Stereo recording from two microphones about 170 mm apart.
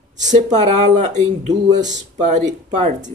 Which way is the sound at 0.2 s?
45° right (ahead or behind).